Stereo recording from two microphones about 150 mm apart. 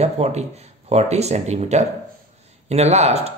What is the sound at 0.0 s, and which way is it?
A man's voice, 45° right (ahead or behind).